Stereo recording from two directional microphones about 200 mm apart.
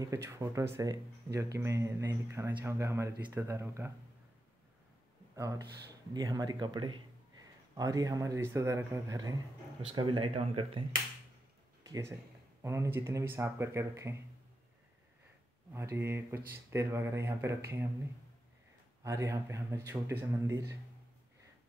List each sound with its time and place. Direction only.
0.0 s speech: 15° right (ahead or behind)
5.3 s speech: 15° right (ahead or behind)
11.8 s speech: 15° right (ahead or behind)
15.7 s speech: 15° right (ahead or behind)
19.0 s speech: 15° right (ahead or behind)